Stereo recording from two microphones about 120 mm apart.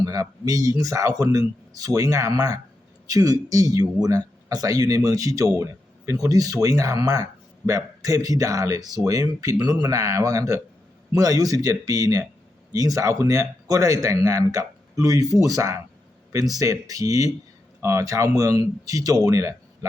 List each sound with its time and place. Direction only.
0.0 s speech: 30° right (ahead or behind)